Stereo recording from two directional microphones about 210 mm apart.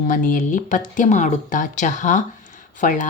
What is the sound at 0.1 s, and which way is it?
Speech, 40° left (ahead or behind).